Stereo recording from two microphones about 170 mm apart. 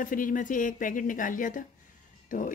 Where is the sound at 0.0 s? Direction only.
50° left (ahead or behind).